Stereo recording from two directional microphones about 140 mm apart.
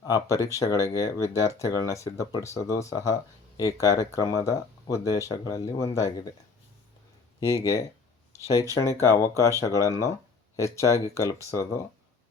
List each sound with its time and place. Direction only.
0.0 s speech: 25° left (ahead or behind)
7.5 s speech: 25° left (ahead or behind)